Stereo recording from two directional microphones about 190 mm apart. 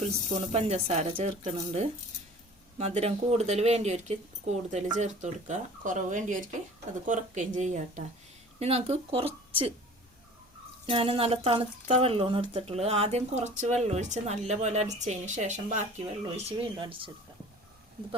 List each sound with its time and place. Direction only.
0.0 s speech: 35° right (ahead or behind)
10.8 s speech: 30° right (ahead or behind)